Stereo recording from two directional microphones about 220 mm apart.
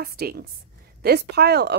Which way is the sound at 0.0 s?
45° right (ahead or behind).